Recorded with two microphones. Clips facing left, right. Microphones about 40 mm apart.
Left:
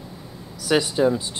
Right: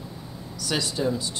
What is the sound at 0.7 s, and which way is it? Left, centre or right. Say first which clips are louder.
Speech: left 7 dB; left.